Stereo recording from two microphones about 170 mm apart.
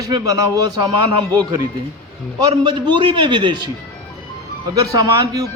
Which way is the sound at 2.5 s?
30° right (ahead or behind).